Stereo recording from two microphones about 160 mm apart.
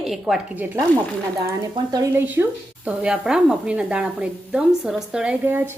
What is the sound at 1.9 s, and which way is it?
Speech, 15° right (ahead or behind).